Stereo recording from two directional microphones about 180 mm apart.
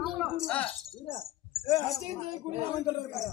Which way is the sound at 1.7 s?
15° left (ahead or behind).